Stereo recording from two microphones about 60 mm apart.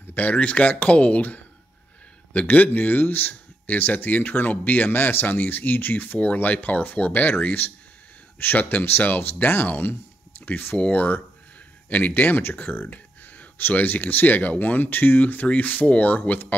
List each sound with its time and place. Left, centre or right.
0.0 s speech: left
12.9 s speech: left